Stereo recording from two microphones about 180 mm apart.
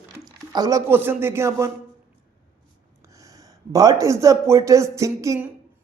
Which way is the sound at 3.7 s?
20° right (ahead or behind).